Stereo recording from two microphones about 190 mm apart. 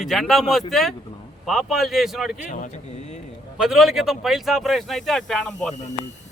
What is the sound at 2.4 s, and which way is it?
Speech, 40° left (ahead or behind).